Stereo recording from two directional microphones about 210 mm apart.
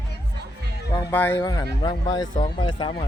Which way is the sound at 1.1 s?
10° left (ahead or behind).